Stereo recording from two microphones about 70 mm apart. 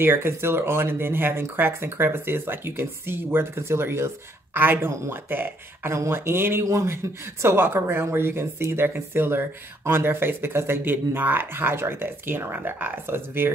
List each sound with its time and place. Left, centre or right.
0.0 s speech: right
6.6 s speech: right
7.4 s speech: right